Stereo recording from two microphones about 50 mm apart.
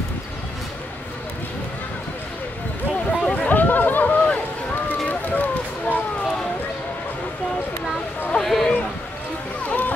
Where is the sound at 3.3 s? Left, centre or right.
Left.